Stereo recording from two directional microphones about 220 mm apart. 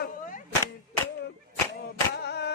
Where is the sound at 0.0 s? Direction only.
35° left (ahead or behind).